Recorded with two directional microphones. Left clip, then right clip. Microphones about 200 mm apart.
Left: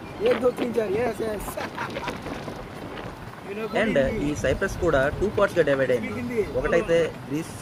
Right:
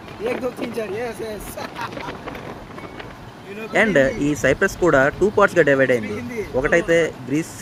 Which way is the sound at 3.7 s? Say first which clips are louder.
Right 7 dB; 30° right (ahead or behind).